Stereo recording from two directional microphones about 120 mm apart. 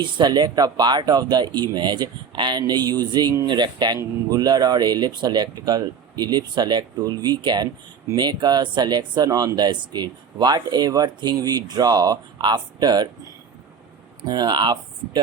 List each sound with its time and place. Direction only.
0.0 s speech: 40° right (ahead or behind)
14.2 s speech: 35° right (ahead or behind)